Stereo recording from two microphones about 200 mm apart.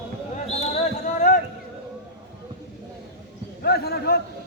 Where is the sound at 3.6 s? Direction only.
50° left (ahead or behind).